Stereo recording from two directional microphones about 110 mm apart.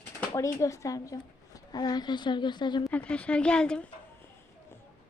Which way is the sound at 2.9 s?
10° left (ahead or behind).